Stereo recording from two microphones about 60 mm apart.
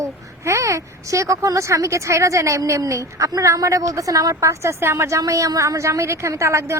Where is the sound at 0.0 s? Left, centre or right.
Right.